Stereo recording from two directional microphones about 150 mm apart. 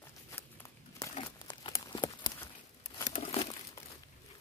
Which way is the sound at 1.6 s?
35° left (ahead or behind).